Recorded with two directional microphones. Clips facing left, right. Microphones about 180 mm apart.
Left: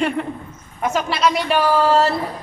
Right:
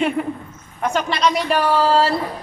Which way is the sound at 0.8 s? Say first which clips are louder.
Even; 5° left (ahead or behind).